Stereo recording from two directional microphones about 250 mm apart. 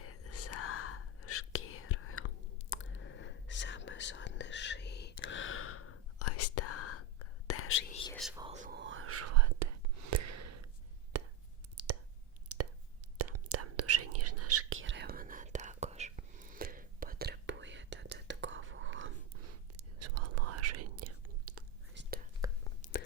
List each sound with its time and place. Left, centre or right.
0.0 s whispering: left
8.1 s whispering: centre
8.5 s whispering: right
11.1 s a sound: right
11.8 s clicking: right
12.5 s plop: right
13.1 s whispering: right
22.0 s whispering: right
22.4 s whispering: centre
22.8 s whispering: left